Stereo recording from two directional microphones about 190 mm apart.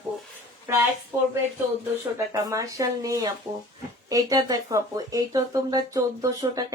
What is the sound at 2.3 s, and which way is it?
Speech, 20° right (ahead or behind).